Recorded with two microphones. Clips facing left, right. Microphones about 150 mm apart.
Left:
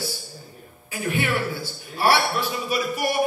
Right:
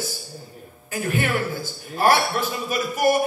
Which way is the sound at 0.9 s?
45° right (ahead or behind).